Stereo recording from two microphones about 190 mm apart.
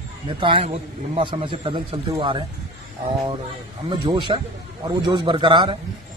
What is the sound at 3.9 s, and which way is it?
A man's voice, 25° right (ahead or behind).